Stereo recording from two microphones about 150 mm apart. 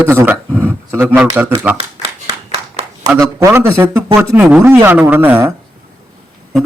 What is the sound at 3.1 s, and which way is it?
Speech, 20° right (ahead or behind).